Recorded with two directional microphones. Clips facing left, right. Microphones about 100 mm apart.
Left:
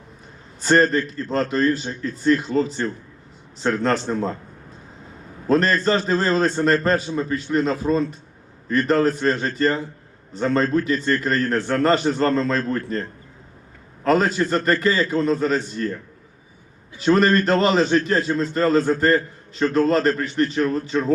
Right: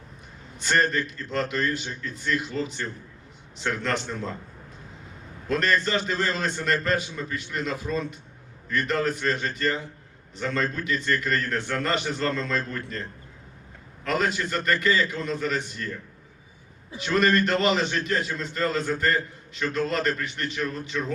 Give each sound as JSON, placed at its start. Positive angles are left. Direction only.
{"t": 0.6, "sound": "a man's voice", "side_deg": 35}
{"t": 5.5, "sound": "a man's voice", "side_deg": 35}
{"t": 17.0, "sound": "a man's voice", "side_deg": 35}